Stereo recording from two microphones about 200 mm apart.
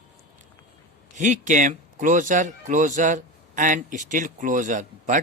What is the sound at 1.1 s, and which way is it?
Speech, 40° right (ahead or behind).